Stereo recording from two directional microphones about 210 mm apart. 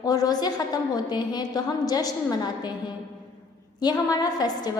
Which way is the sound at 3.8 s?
20° left (ahead or behind).